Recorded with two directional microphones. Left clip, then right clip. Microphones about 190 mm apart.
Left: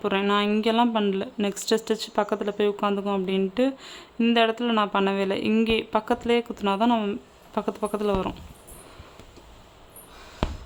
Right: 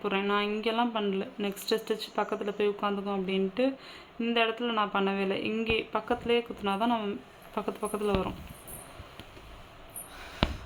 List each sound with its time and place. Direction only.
0.0 s speech: 35° left (ahead or behind)